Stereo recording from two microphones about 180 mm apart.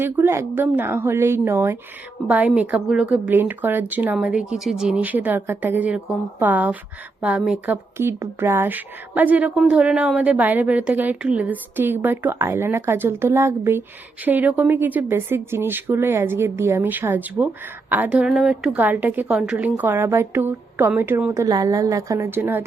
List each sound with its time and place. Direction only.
0.0 s speech: 15° right (ahead or behind)